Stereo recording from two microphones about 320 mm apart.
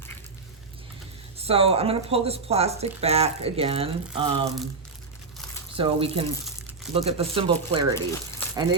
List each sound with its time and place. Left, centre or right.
1.4 s speech: centre
5.7 s speech: centre
7.9 s speech: centre